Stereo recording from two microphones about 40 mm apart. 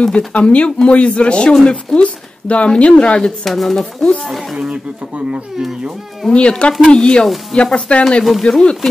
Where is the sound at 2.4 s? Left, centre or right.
Left.